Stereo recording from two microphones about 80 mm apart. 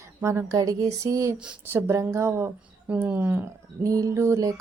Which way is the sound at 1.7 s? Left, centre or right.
Right.